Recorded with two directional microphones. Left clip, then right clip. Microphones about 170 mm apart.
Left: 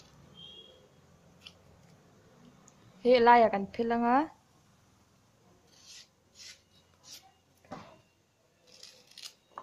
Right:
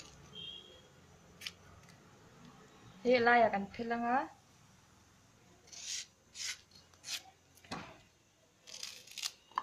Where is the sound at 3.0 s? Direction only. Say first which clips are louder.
Left 6 dB; 45° left (ahead or behind).